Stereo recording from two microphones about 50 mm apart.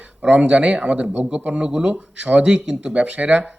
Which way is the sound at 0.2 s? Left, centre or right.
Right.